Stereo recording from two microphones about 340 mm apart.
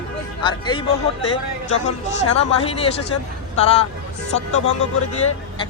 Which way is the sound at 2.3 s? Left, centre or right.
Centre.